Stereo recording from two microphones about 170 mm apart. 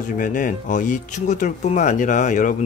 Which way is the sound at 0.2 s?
50° left (ahead or behind).